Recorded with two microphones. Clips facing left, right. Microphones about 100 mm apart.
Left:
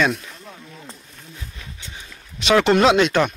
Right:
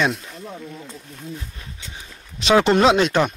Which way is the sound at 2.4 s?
35° right (ahead or behind).